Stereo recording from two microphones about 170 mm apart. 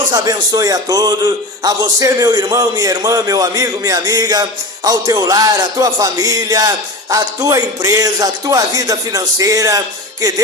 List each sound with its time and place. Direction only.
0.1 s a man's voice: 20° right (ahead or behind)